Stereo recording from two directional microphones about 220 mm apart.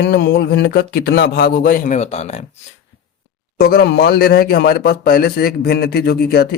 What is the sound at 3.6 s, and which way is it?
Speech, 45° left (ahead or behind).